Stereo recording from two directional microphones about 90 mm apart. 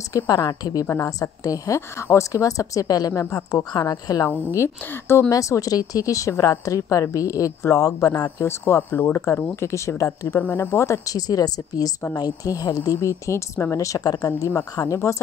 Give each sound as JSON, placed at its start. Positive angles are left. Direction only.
{"t": 0.1, "sound": "a woman's voice", "side_deg": 45}
{"t": 0.8, "sound": "a woman's voice", "side_deg": 30}
{"t": 4.6, "sound": "a woman's voice", "side_deg": 30}